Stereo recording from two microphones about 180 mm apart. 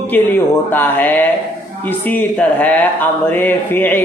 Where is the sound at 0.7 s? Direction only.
10° left (ahead or behind).